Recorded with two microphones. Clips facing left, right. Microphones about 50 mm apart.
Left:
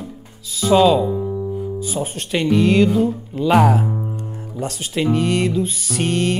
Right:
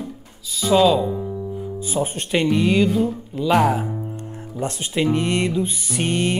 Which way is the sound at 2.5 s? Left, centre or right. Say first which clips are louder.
Left 5 dB; centre.